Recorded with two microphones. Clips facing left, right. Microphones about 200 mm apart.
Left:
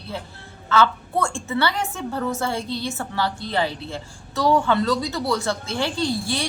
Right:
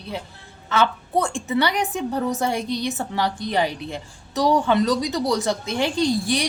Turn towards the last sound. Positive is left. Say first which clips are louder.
# right 3 dB
turn(degrees=-15)  # may be behind; listen again after turning